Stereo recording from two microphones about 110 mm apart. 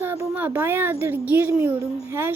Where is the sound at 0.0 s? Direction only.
20° right (ahead or behind).